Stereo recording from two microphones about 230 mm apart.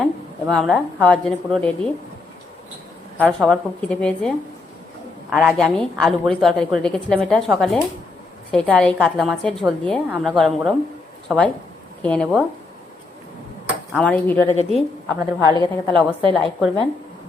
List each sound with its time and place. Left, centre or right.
0.0 s speech: centre
3.2 s a woman's voice: centre
13.9 s speech: centre
15.2 s a woman's voice: centre
15.5 s speech: centre
15.9 s a woman's voice: right
16.3 s a woman's voice: centre